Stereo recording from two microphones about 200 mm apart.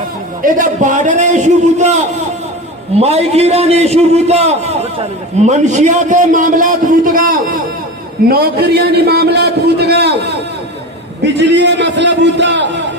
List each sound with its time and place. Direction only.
0.4 s a man's voice: 40° right (ahead or behind)
11.3 s a man's voice: 60° right (ahead or behind)